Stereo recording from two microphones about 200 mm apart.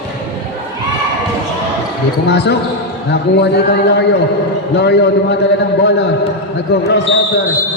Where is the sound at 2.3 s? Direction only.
55° left (ahead or behind).